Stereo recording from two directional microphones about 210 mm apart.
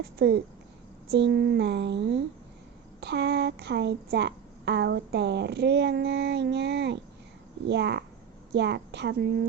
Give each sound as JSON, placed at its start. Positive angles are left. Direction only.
{"t": 0.2, "sound": "a woman's voice", "side_deg": -50}